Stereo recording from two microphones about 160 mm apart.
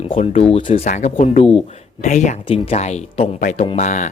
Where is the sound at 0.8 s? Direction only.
45° left (ahead or behind).